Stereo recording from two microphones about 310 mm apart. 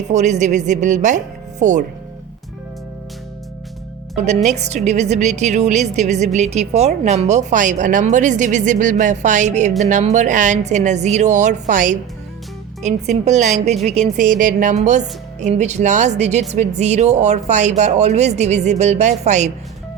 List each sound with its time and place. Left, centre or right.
0.1 s a woman's voice: right
4.4 s a woman's voice: right